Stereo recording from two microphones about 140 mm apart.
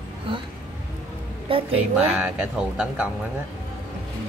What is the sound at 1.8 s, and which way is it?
Speech, 10° right (ahead or behind).